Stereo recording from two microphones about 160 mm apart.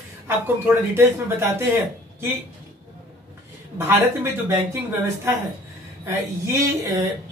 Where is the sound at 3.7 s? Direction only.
15° right (ahead or behind).